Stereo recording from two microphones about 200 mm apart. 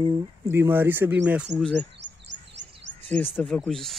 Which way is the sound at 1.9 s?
60° right (ahead or behind).